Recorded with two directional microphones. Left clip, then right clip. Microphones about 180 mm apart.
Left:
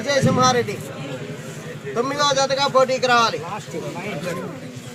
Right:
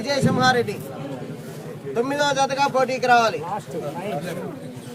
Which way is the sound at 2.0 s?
30° right (ahead or behind).